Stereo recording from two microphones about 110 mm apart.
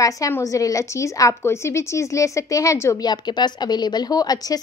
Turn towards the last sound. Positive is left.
turn(degrees=35)  # may be behind; listen again after turning